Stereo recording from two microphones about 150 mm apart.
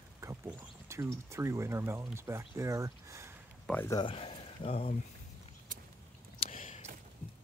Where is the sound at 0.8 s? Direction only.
20° right (ahead or behind).